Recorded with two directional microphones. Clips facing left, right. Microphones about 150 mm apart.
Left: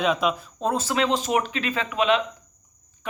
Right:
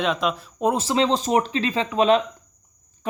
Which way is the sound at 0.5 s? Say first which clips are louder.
Right 3 dB; 15° right (ahead or behind).